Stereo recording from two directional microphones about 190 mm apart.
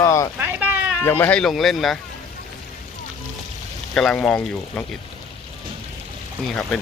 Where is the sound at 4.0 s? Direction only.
Centre (ahead or behind).